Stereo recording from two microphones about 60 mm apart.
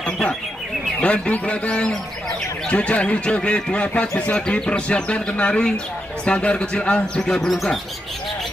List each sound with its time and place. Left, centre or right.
0.0 s bird: centre
1.0 s speech: left
7.3 s speech: centre